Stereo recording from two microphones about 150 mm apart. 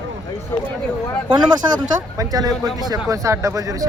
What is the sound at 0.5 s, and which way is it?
Speech, 15° left (ahead or behind).